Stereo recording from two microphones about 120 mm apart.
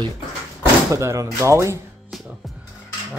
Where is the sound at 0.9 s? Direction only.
25° right (ahead or behind).